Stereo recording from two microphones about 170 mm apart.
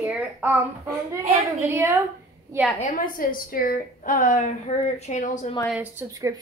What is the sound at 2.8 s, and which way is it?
A woman's voice, 50° left (ahead or behind).